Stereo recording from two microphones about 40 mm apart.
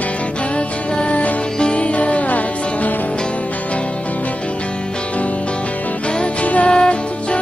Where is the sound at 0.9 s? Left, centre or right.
Left.